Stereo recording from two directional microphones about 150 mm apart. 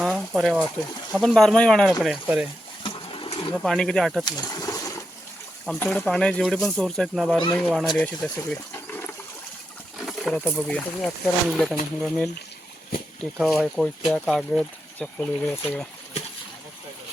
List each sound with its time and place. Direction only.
0.0 s a sound: centre (ahead or behind)
1.1 s speech: 5° left (ahead or behind)
2.8 s pigeon: 35° left (ahead or behind)
3.6 s speech: 5° left (ahead or behind)
4.3 s a sound: 25° left (ahead or behind)
5.8 s speech: 15° left (ahead or behind)
6.1 s speech: 5° left (ahead or behind)
10.1 s a sound: centre (ahead or behind)
10.5 s speech: centre (ahead or behind)
13.4 s speech: centre (ahead or behind)